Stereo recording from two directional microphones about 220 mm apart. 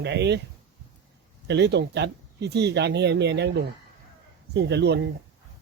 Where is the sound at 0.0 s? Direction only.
50° right (ahead or behind).